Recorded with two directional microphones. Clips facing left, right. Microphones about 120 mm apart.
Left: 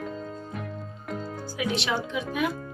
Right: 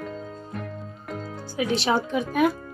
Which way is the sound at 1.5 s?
30° right (ahead or behind).